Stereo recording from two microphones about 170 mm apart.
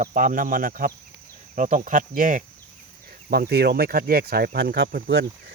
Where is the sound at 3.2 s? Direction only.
65° right (ahead or behind).